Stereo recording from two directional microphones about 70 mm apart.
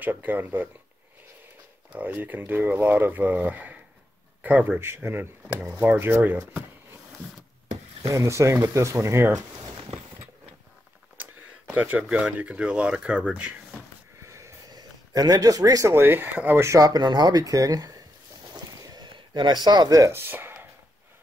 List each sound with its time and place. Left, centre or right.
0.0 s speech: right
1.9 s speech: right
4.7 s speech: right
8.0 s speech: right
11.7 s speech: right
14.2 s a sound: right
14.7 s a sound: right
15.9 s speech: right
16.6 s speech: right
18.5 s a sound: right
20.1 s speech: right